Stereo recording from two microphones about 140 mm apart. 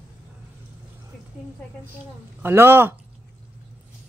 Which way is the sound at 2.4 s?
15° right (ahead or behind).